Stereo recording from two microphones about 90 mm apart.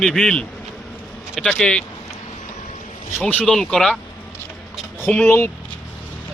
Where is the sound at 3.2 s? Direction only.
15° left (ahead or behind).